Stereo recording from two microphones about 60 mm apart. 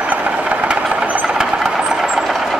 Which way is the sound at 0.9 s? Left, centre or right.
Right.